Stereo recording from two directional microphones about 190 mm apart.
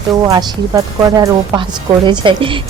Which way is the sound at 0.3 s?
20° right (ahead or behind).